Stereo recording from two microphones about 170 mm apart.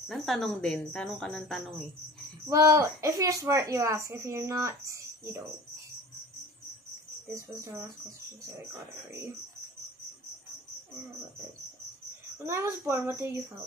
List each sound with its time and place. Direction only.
0.1 s speech: centre (ahead or behind)
2.4 s a woman's voice: 20° right (ahead or behind)
7.3 s a woman's voice: 15° right (ahead or behind)
12.4 s a woman's voice: 15° right (ahead or behind)